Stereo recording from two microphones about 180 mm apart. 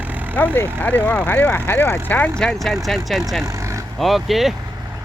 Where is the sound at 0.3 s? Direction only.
10° left (ahead or behind).